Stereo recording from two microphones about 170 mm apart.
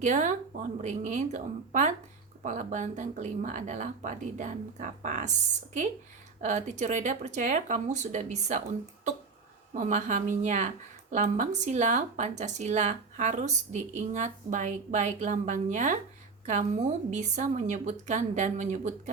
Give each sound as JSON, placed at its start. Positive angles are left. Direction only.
{"t": 0.0, "sound": "speech", "side_deg": -45}
{"t": 6.4, "sound": "speech", "side_deg": -45}
{"t": 9.7, "sound": "speech", "side_deg": -45}